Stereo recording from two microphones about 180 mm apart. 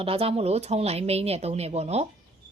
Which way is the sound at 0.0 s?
30° right (ahead or behind).